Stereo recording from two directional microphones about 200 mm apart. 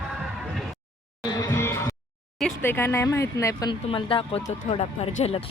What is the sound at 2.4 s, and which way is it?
Speech, 10° left (ahead or behind).